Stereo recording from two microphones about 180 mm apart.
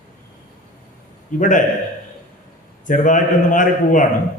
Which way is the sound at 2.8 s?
45° left (ahead or behind).